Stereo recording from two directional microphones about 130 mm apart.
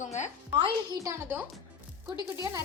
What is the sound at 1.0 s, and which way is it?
Speech, 20° right (ahead or behind).